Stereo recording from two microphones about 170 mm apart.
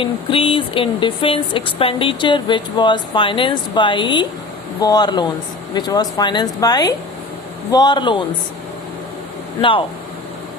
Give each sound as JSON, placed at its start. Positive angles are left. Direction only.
{"t": 0.0, "sound": "speech", "side_deg": 30}
{"t": 9.6, "sound": "speech", "side_deg": 30}